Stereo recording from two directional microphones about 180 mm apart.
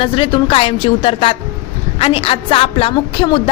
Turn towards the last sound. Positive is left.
turn(degrees=30)  # may be behind; listen again after turning